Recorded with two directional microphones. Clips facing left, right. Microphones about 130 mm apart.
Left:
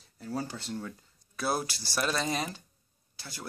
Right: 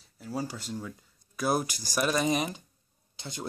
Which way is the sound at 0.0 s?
10° right (ahead or behind).